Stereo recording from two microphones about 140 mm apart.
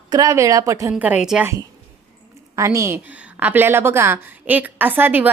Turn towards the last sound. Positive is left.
turn(degrees=-15)  # may be behind; listen again after turning